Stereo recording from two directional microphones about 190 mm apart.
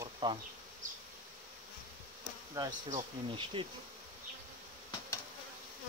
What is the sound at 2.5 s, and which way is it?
Bee, 20° right (ahead or behind).